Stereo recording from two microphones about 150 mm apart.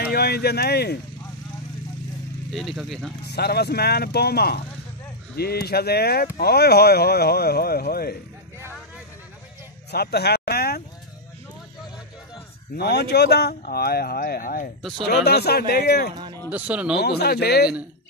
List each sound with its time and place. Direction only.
0.1 s speech: 90° left
2.5 s speech: centre (ahead or behind)
3.3 s speech: 90° left
9.8 s a sound: 90° left
12.7 s speech: 90° left; by 14.7 s 70° left (ahead or behind)
15.0 s speech: 90° left
16.4 s speech: 10° right (ahead or behind)
17.0 s speech: 90° left